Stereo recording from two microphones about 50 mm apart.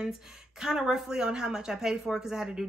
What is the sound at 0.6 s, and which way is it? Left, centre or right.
A woman's voice, centre.